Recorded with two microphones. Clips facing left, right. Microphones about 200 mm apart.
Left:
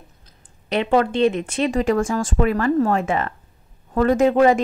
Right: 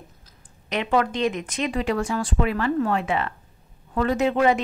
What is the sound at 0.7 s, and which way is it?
Speech, 30° left (ahead or behind).